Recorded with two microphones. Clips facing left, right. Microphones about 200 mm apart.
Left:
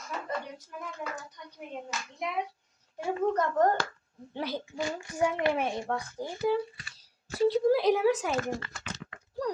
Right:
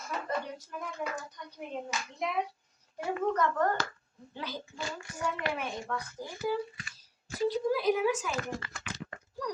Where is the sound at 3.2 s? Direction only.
40° left (ahead or behind).